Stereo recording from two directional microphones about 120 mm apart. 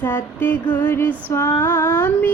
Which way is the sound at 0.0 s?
15° left (ahead or behind).